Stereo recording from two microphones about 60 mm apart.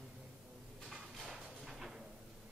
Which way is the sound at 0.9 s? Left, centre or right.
Centre.